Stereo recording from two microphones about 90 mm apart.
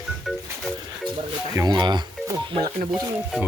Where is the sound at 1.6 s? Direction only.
55° right (ahead or behind).